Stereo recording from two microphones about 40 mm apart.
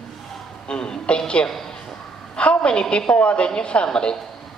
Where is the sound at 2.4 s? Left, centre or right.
Left.